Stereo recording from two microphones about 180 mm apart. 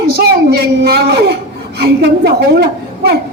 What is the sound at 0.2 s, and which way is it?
A woman's voice, 65° right (ahead or behind).